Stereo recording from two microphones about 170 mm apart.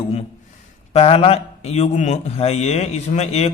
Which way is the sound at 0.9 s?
35° left (ahead or behind).